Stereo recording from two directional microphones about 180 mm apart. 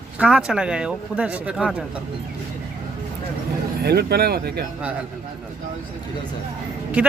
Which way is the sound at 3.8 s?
60° right (ahead or behind).